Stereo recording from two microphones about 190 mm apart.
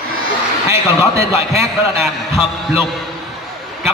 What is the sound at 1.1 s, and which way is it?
Speech, 15° right (ahead or behind).